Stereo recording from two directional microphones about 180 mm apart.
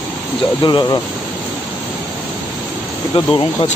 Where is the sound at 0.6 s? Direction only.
25° left (ahead or behind).